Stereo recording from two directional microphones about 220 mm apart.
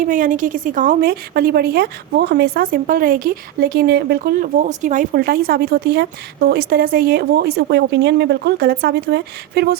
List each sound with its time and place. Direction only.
0.0 s a woman's voice: 35° right (ahead or behind)